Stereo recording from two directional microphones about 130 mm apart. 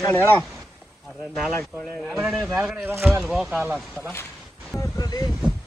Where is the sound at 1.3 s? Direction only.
5° left (ahead or behind).